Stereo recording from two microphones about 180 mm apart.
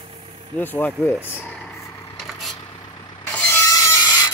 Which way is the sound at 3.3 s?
10° left (ahead or behind).